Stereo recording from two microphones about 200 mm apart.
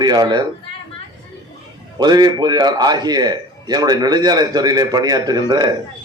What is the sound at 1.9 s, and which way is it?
A man's voice, 20° right (ahead or behind).